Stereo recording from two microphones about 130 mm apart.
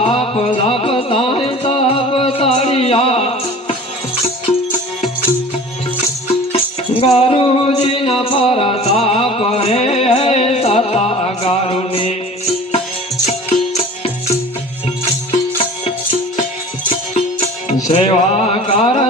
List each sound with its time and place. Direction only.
0.0 s music: 50° left (ahead or behind)
6.9 s a sound: 50° left (ahead or behind)
7.7 s music: 55° left (ahead or behind)
17.2 s music: 50° left (ahead or behind)